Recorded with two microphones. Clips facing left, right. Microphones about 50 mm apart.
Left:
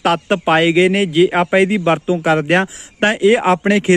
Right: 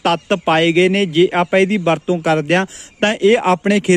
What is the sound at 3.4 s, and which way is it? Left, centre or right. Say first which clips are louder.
Speech: left 1 dB; centre.